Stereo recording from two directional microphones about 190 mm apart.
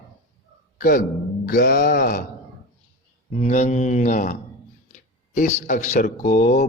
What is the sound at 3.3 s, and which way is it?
Speech, 40° left (ahead or behind).